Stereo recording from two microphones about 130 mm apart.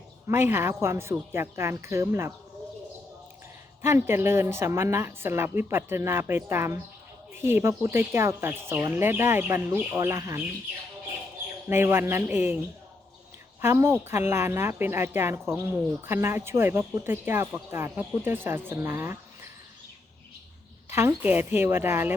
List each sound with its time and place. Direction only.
0.3 s speech: 20° right (ahead or behind)
3.8 s speech: 20° right (ahead or behind)
11.7 s speech: 20° right (ahead or behind)
20.9 s speech: 20° right (ahead or behind)